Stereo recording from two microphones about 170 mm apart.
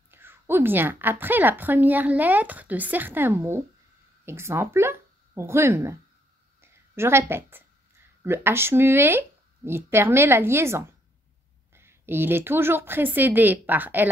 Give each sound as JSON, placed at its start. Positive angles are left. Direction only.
{"t": 0.1, "sound": "a woman's voice", "side_deg": -15}
{"t": 6.6, "sound": "a sound", "side_deg": -15}
{"t": 8.2, "sound": "a woman's voice", "side_deg": -15}